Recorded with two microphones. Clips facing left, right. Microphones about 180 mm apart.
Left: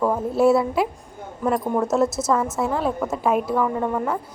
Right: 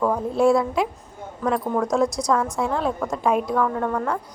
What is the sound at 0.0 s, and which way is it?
A woman's voice, 5° left (ahead or behind).